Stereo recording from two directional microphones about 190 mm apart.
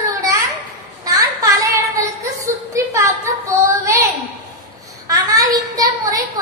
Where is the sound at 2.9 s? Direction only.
15° right (ahead or behind).